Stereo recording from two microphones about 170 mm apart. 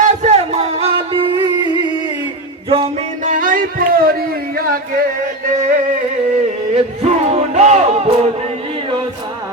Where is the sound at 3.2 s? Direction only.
50° right (ahead or behind).